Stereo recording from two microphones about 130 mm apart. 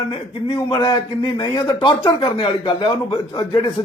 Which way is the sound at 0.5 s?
30° left (ahead or behind).